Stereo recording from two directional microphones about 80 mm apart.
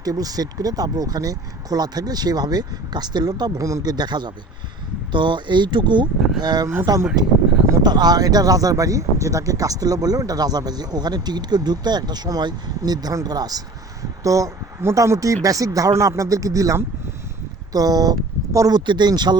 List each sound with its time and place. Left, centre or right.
0.0 s speech: right
3.9 s speech: right
6.4 s speech: right
18.9 s speech: right